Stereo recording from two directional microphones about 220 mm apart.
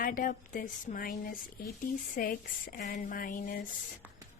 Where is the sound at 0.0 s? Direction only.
40° left (ahead or behind).